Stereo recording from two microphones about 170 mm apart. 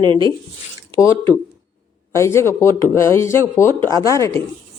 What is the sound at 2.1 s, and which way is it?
Speech, 15° left (ahead or behind).